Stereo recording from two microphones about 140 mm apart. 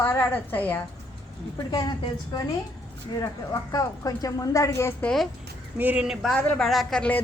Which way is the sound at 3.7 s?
25° left (ahead or behind).